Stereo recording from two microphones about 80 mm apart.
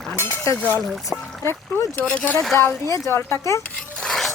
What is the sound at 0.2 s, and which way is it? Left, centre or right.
Speech, left.